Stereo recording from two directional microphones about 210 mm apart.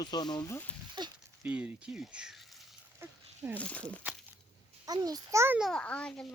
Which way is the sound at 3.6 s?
5° left (ahead or behind).